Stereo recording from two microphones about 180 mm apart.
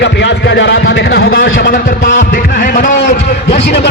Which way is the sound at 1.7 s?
50° left (ahead or behind).